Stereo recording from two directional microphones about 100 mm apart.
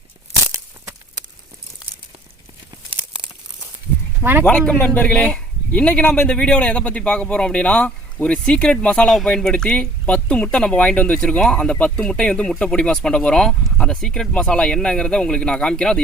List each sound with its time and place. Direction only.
4.2 s speech: 20° right (ahead or behind)
4.4 s a man's voice: 10° left (ahead or behind)